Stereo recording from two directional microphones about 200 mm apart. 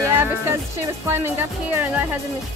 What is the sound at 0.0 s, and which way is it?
Music, 15° right (ahead or behind).